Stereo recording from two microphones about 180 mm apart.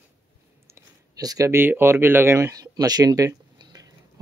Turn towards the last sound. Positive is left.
turn(degrees=-20)  # may be behind; listen again after turning